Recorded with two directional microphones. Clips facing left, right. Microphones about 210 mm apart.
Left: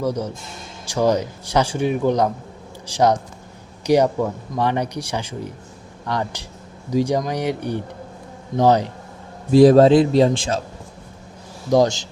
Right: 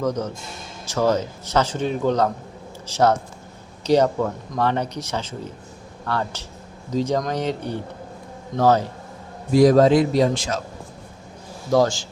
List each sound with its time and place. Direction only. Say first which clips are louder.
0.0 s speech: left 1 dB; 10° left (ahead or behind)
9.5 s a man's voice: left 3 dB; 30° left (ahead or behind)
11.7 s a man's voice: left 2 dB; 20° left (ahead or behind)